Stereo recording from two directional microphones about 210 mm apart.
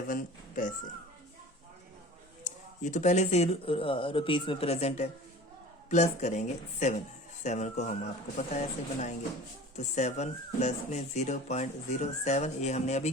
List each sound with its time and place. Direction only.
0.1 s speech: 40° left (ahead or behind)
2.4 s speech: 35° left (ahead or behind)